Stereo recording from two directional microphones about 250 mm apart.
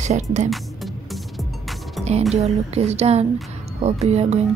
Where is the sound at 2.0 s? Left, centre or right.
Centre.